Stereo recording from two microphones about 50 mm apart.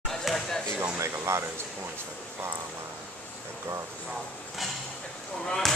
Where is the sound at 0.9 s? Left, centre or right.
Right.